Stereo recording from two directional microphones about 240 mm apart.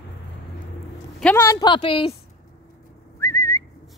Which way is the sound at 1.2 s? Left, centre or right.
Centre.